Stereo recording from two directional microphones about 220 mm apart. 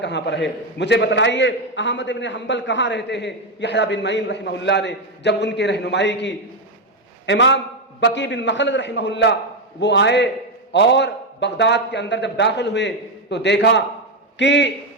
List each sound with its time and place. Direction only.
0.0 s a man's voice: 50° left (ahead or behind)